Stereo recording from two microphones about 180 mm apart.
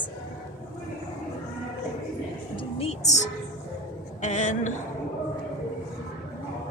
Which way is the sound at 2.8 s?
35° left (ahead or behind).